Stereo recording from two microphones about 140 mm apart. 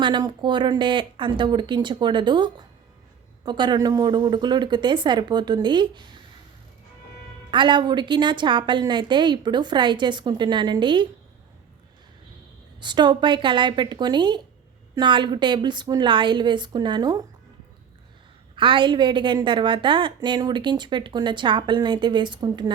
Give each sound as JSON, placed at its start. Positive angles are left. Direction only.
{"t": 0.0, "sound": "a woman's voice", "side_deg": -30}
{"t": 7.5, "sound": "a woman's voice", "side_deg": -35}
{"t": 12.8, "sound": "a woman's voice", "side_deg": -30}
{"t": 18.5, "sound": "a woman's voice", "side_deg": -35}